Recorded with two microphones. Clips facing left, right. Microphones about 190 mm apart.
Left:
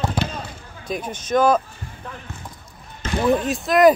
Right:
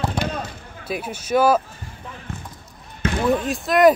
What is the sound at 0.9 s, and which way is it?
Speech, 10° right (ahead or behind).